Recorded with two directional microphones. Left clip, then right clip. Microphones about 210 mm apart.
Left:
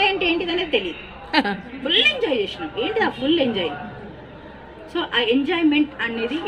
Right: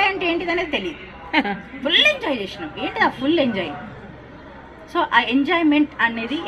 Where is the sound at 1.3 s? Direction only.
15° left (ahead or behind).